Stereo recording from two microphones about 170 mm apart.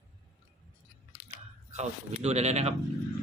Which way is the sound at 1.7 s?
40° right (ahead or behind).